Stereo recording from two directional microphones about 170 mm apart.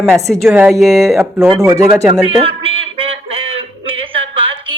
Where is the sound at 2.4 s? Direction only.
35° right (ahead or behind).